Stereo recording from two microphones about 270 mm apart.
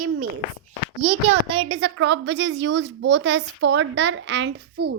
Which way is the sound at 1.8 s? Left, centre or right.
Right.